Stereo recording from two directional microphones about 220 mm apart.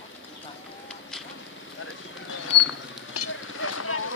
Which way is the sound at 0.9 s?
Centre (ahead or behind).